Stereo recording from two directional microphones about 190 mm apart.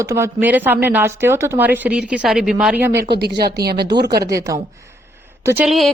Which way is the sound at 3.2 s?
60° right (ahead or behind).